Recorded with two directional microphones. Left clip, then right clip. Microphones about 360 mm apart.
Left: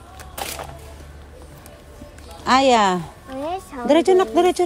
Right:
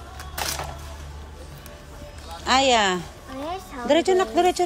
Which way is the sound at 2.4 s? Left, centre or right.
Centre.